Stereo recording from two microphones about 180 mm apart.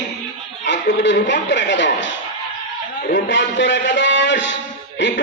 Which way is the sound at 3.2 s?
90° left.